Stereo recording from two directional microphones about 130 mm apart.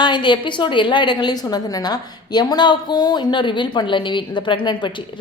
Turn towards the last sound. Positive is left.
turn(degrees=40)  # may be behind; listen again after turning